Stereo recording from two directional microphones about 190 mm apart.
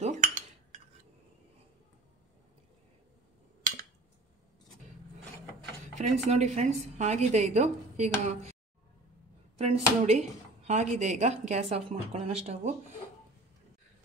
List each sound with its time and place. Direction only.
0.0 s cutlery: 40° right (ahead or behind)
5.9 s speech: 35° right (ahead or behind)
9.6 s speech: 35° right (ahead or behind)